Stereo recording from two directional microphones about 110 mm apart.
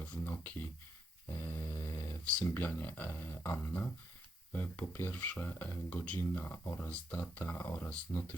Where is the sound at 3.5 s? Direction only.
10° left (ahead or behind).